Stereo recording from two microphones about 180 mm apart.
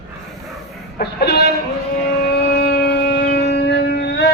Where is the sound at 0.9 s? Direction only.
60° left (ahead or behind).